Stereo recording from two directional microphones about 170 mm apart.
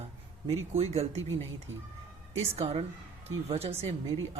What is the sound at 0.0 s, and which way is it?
Speech, 35° right (ahead or behind).